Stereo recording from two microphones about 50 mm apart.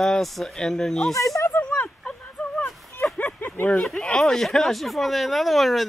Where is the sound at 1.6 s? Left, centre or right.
Left.